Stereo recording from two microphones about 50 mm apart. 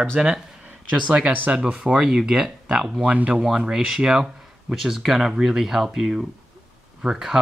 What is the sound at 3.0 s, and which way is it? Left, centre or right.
Speech, right.